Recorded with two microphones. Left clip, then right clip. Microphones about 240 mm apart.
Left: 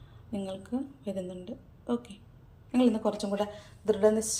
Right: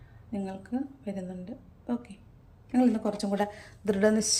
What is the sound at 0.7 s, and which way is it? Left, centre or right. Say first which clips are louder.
Speech: right 2 dB; centre.